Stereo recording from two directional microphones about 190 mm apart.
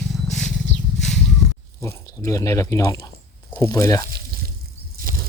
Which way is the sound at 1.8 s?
15° left (ahead or behind).